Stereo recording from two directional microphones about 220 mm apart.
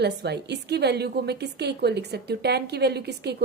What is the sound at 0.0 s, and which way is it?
A woman's voice, 50° right (ahead or behind).